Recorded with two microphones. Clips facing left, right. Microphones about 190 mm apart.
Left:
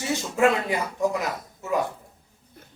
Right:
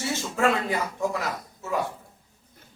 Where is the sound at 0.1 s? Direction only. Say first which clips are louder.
Left 4 dB; 15° left (ahead or behind).